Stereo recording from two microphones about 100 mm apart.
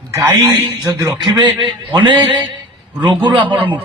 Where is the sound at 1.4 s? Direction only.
55° right (ahead or behind).